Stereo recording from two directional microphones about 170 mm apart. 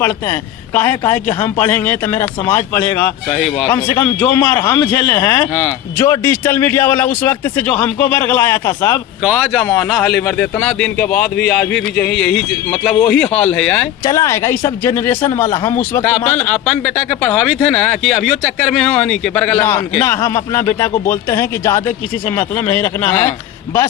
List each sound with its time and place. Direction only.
0.0 s speech: 15° left (ahead or behind)
3.2 s a man's voice: centre (ahead or behind)
3.8 s speech: 10° left (ahead or behind)
14.0 s speech: 20° left (ahead or behind)
17.2 s speech: 10° left (ahead or behind)